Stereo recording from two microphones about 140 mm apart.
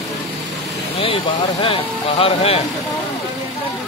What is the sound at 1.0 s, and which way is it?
Speech, 40° left (ahead or behind).